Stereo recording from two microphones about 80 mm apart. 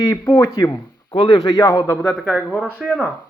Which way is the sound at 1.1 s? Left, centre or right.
Left.